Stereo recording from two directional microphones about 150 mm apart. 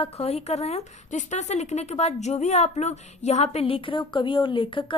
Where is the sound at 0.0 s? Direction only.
45° left (ahead or behind).